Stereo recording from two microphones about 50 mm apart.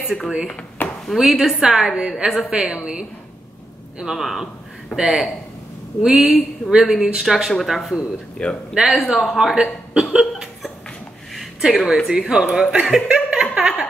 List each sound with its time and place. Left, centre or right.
0.0 s speech: centre
0.8 s a sound: left
1.4 s speech: centre
7.5 s speech: centre
8.4 s a man's voice: centre
8.7 s speech: centre
10.1 s a sound: centre
12.1 s speech: centre
12.7 s speech: centre
13.1 s a sound: centre